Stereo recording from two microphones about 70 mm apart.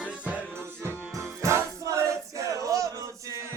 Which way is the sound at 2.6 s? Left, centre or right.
Right.